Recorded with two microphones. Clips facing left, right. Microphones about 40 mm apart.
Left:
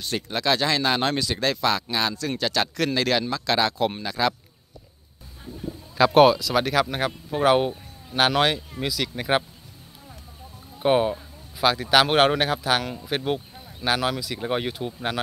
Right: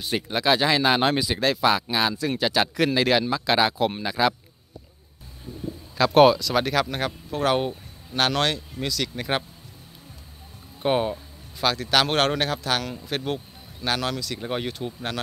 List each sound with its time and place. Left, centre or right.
0.0 s speech: centre
5.9 s speech: centre
10.8 s speech: centre